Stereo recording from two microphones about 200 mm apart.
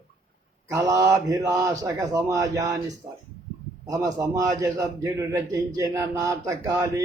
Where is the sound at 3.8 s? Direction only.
15° right (ahead or behind).